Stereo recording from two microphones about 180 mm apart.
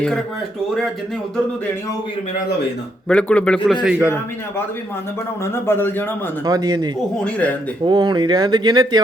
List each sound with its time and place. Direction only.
0.0 s speech: 5° left (ahead or behind)
3.1 s speech: 5° left (ahead or behind)
3.8 s speech: 10° right (ahead or behind)
5.6 s a man's voice: 10° left (ahead or behind)
6.4 s speech: 20° right (ahead or behind)